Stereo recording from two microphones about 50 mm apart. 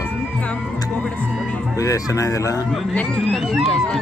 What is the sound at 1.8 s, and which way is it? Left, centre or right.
Speech, left.